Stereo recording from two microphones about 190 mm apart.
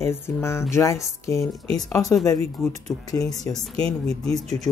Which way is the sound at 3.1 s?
20° left (ahead or behind).